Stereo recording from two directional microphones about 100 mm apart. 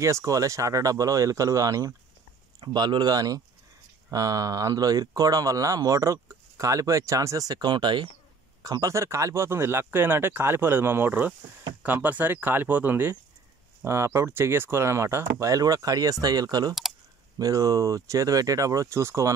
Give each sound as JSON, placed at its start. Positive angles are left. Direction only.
{"t": 0.0, "sound": "speech", "side_deg": -30}
{"t": 2.6, "sound": "speech", "side_deg": -50}
{"t": 8.6, "sound": "speech", "side_deg": -35}